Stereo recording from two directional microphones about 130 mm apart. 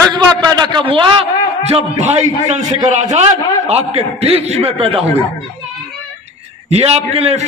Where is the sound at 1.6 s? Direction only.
55° right (ahead or behind).